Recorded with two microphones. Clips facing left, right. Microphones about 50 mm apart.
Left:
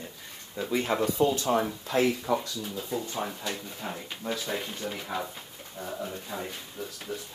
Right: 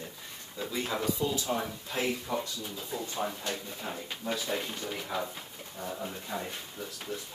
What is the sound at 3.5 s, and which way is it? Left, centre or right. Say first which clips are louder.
Speech: left 1 dB; centre.